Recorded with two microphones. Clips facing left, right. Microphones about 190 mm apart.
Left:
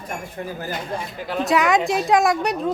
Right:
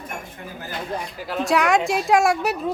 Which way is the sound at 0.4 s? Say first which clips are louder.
Left 7 dB; 35° left (ahead or behind).